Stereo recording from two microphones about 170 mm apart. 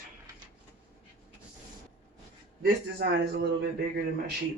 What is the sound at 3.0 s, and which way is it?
Speech, 75° right (ahead or behind).